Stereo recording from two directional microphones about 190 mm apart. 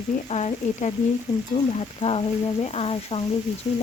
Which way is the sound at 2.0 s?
30° left (ahead or behind).